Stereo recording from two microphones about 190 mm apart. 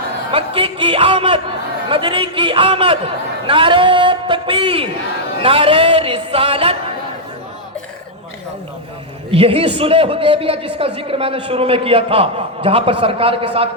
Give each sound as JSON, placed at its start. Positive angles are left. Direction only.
{"t": 0.3, "sound": "a man's voice", "side_deg": -30}
{"t": 9.3, "sound": "a man's voice", "side_deg": -30}